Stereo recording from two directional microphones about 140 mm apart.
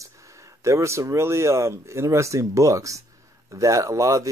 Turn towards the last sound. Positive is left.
turn(degrees=-25)  # may be behind; listen again after turning